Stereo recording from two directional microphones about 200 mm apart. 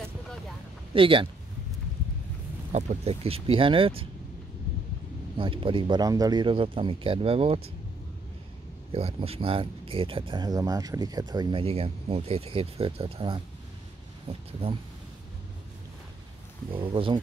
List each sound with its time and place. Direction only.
0.9 s speech: 25° right (ahead or behind)
2.7 s speech: 30° right (ahead or behind)
5.4 s speech: 25° right (ahead or behind)
8.9 s speech: 30° right (ahead or behind)
16.7 s speech: 25° right (ahead or behind)